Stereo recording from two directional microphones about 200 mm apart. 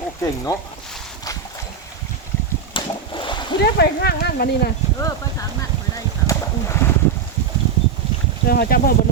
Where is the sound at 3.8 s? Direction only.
55° left (ahead or behind).